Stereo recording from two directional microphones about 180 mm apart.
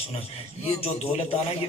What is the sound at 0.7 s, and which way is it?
Speech, 30° left (ahead or behind).